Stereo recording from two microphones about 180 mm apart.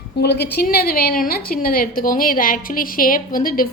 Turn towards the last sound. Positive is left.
turn(degrees=50)  # may be behind; listen again after turning